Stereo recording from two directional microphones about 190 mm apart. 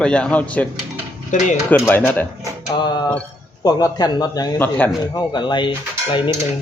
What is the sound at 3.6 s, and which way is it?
A man's voice, 20° left (ahead or behind).